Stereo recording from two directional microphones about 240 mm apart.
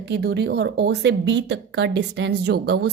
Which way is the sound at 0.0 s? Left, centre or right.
Right.